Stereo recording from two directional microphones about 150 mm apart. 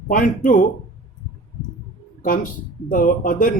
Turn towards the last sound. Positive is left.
turn(degrees=65)  # may be behind; listen again after turning